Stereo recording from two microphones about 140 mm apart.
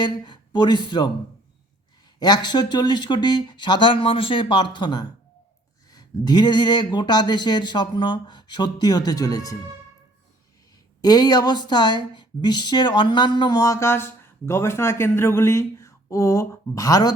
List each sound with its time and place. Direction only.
0.0 s speech: 30° left (ahead or behind)
2.1 s speech: 30° left (ahead or behind)
11.0 s speech: 30° left (ahead or behind)